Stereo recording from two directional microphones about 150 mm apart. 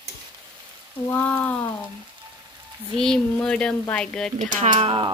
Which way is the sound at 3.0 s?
5° left (ahead or behind).